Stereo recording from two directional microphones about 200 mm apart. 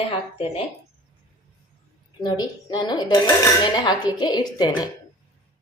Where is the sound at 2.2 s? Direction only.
20° left (ahead or behind).